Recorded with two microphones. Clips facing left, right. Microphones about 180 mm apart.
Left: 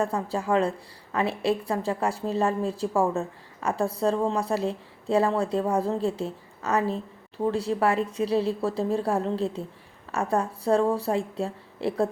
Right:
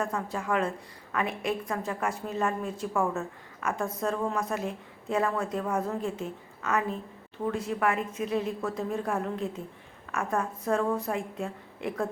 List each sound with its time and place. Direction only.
0.0 s a woman's voice: 30° left (ahead or behind)